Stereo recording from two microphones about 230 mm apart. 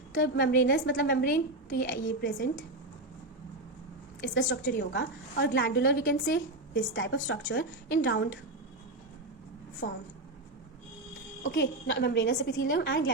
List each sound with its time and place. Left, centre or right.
0.1 s a woman's voice: left
4.2 s a woman's voice: left
9.8 s a woman's voice: left
11.4 s a woman's voice: left